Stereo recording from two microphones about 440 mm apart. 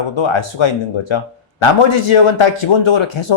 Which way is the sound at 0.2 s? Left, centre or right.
Left.